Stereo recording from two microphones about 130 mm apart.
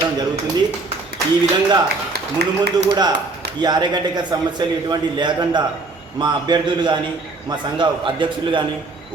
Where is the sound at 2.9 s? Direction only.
35° right (ahead or behind).